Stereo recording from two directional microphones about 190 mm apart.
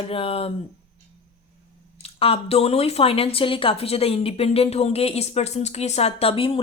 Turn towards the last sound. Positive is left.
turn(degrees=30)  # may be behind; listen again after turning